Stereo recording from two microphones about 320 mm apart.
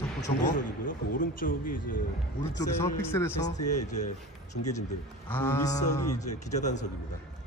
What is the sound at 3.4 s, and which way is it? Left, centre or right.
Speech, left.